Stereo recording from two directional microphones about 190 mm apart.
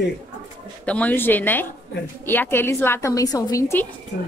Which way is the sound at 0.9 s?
10° left (ahead or behind).